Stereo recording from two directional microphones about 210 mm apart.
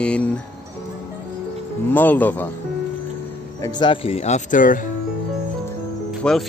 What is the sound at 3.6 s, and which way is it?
Speech, 20° left (ahead or behind).